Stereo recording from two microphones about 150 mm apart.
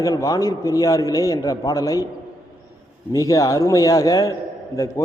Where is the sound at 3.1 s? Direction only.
20° left (ahead or behind).